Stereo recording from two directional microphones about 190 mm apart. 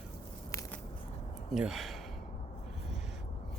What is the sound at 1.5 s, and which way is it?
Speech, centre (ahead or behind).